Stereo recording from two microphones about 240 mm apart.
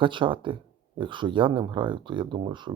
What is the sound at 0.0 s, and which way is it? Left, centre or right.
Speech, right.